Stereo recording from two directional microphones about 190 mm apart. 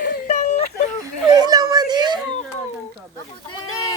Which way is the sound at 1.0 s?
20° right (ahead or behind).